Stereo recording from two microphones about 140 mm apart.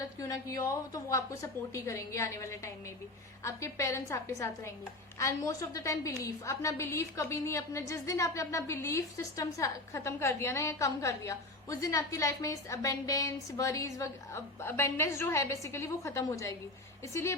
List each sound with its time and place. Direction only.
0.2 s a woman's voice: 20° left (ahead or behind)